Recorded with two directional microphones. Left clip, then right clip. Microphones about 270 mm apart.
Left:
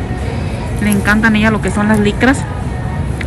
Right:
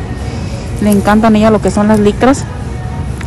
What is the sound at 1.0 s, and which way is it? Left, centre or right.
Speech, centre.